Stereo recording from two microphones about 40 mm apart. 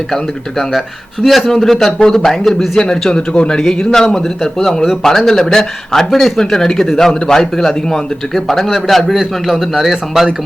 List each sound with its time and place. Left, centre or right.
1.2 s a man's voice: centre; by 3.6 s left
3.6 s a man's voice: centre
8.4 s a man's voice: centre